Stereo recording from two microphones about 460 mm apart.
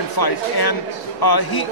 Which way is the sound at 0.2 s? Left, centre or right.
Left.